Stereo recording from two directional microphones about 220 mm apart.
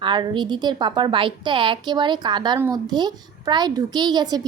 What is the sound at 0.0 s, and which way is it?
A woman's voice, 20° right (ahead or behind).